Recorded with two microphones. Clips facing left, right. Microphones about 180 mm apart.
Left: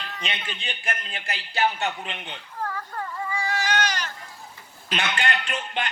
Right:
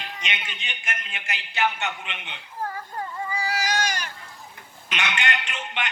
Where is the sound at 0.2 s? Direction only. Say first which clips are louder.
Left 2 dB; 35° left (ahead or behind).